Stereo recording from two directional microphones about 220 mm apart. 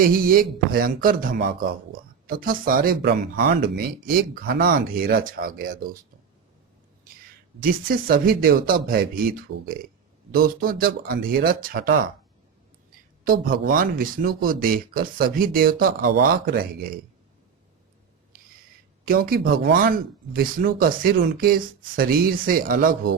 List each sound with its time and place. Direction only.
0.0 s speech: 40° right (ahead or behind)
7.6 s speech: 40° right (ahead or behind)
13.2 s speech: 40° right (ahead or behind)
19.0 s speech: 40° right (ahead or behind)